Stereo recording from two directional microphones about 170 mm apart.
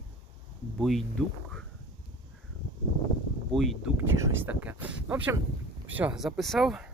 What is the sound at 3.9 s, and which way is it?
Speech, 10° right (ahead or behind).